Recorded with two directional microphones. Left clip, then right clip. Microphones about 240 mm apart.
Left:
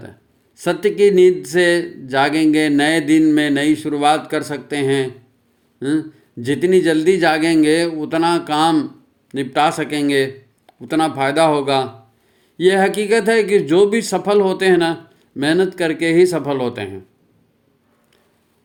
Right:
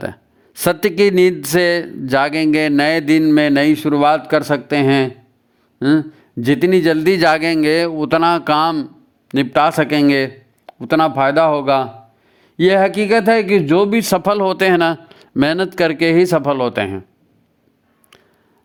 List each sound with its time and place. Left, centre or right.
0.0 s speech: right